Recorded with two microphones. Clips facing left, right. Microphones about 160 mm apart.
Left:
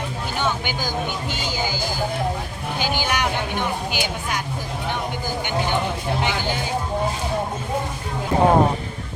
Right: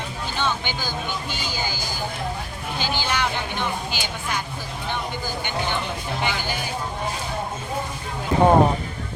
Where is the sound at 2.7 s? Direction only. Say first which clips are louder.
Left 2 dB; 15° left (ahead or behind).